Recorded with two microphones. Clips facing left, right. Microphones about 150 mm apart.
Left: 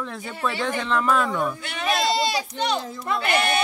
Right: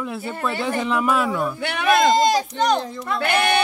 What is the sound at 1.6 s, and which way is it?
A man's voice, 60° right (ahead or behind).